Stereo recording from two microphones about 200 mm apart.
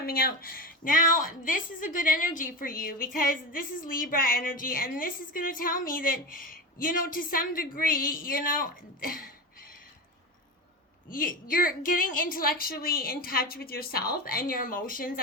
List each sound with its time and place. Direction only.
0.0 s a woman's voice: 50° left (ahead or behind)
11.1 s a woman's voice: 45° left (ahead or behind)